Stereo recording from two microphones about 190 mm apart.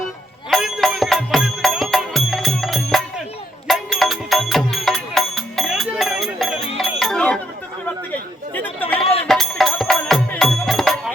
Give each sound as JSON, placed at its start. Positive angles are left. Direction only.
{"t": 0.5, "sound": "music", "side_deg": 0}
{"t": 7.0, "sound": "chatter", "side_deg": 5}
{"t": 8.5, "sound": "chatter", "side_deg": 10}
{"t": 9.0, "sound": "music", "side_deg": 30}
{"t": 9.2, "sound": "music", "side_deg": 0}